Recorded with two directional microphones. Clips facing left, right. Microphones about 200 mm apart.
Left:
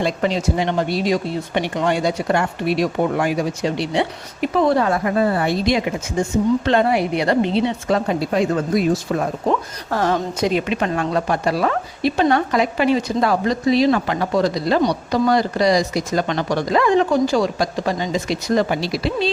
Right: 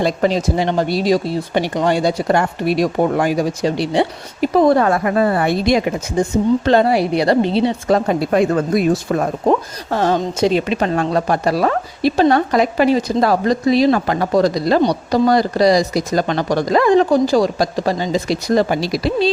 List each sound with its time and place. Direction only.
0.0 s a woman's voice: 40° right (ahead or behind)
4.8 s a woman's voice: 60° right (ahead or behind)
6.2 s a woman's voice: 35° right (ahead or behind); by 9.0 s 55° right (ahead or behind)
9.9 s a woman's voice: 25° right (ahead or behind)